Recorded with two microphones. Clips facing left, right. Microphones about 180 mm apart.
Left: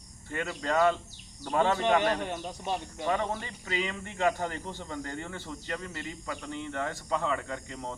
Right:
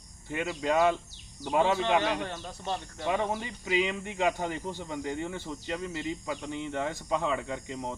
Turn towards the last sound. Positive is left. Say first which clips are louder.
# right 2 dB
turn(degrees=-15)  # may be behind; listen again after turning